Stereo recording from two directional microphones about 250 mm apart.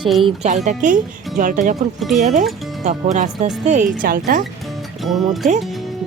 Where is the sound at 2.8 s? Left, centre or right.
Right.